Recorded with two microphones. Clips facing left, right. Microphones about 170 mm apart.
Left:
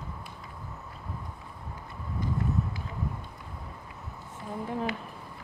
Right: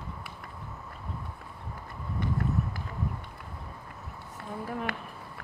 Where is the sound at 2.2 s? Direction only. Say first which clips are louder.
Right 1 dB; 70° right (ahead or behind).